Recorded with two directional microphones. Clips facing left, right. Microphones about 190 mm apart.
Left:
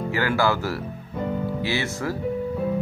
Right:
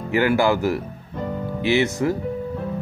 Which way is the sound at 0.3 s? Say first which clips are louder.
Right 3 dB; 15° right (ahead or behind).